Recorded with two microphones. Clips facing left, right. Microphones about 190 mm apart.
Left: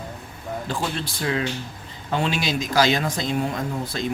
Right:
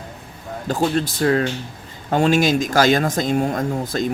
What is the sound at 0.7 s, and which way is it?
Speech, 45° right (ahead or behind).